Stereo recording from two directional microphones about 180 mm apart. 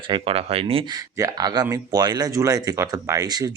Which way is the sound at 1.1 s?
20° right (ahead or behind).